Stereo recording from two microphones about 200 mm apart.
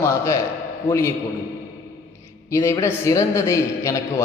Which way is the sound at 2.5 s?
15° left (ahead or behind).